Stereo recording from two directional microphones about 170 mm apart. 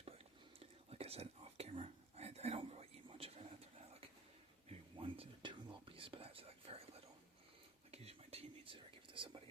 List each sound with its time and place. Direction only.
0.6 s whispering: 35° right (ahead or behind)
4.9 s whispering: 35° right (ahead or behind)
7.9 s whispering: 35° right (ahead or behind)